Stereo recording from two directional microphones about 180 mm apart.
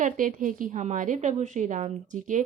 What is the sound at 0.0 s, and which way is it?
A woman's voice, 50° right (ahead or behind).